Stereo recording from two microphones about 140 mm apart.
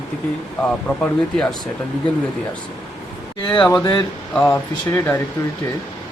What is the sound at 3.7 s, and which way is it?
Speech, 30° left (ahead or behind).